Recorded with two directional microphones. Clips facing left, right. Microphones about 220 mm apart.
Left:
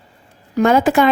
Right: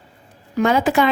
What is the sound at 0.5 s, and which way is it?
Speech, 45° left (ahead or behind).